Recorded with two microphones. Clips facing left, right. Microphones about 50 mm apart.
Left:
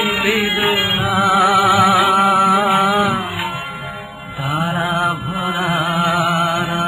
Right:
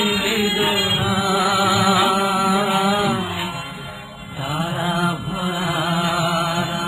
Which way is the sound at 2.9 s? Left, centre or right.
Left.